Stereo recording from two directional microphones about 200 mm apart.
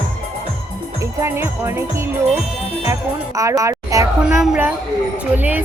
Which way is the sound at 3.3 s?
15° right (ahead or behind).